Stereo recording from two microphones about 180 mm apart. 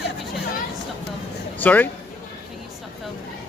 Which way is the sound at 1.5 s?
10° left (ahead or behind).